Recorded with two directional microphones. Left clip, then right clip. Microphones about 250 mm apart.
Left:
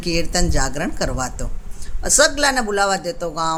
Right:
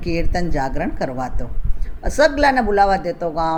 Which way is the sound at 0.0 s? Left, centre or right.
Centre.